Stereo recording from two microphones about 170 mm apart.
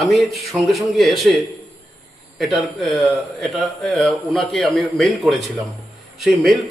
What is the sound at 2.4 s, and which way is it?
Speech, centre (ahead or behind).